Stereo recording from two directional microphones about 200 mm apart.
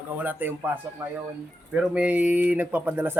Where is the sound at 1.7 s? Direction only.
5° right (ahead or behind).